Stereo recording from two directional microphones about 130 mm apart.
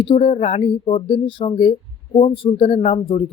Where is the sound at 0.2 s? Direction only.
50° left (ahead or behind).